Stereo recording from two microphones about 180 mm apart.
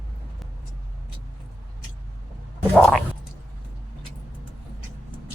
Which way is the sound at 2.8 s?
5° left (ahead or behind).